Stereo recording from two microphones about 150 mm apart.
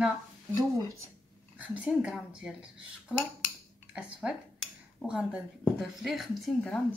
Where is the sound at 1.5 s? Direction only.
10° right (ahead or behind).